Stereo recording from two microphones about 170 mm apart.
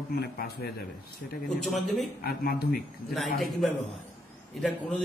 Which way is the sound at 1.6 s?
Centre (ahead or behind).